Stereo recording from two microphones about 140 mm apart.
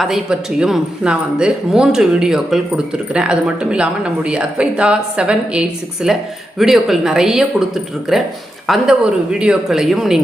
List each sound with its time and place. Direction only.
0.0 s speech: 5° right (ahead or behind)